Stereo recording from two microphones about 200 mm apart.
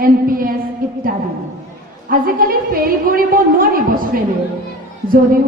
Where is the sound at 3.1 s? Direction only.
45° right (ahead or behind).